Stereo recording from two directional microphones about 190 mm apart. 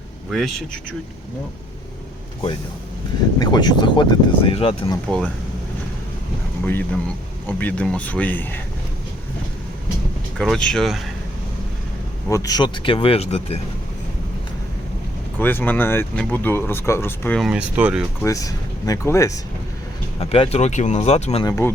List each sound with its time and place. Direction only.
0.3 s speech: centre (ahead or behind)
3.3 s speech: 20° left (ahead or behind)
5.0 s speech: 5° left (ahead or behind)
7.4 s speech: 10° left (ahead or behind)
10.3 s speech: centre (ahead or behind)
12.3 s speech: 20° left (ahead or behind)
15.4 s speech: 10° left (ahead or behind)
17.4 s speech: 5° right (ahead or behind)
18.2 s speech: 15° left (ahead or behind)
20.1 s speech: 30° left (ahead or behind)
21.4 s speech: 15° left (ahead or behind)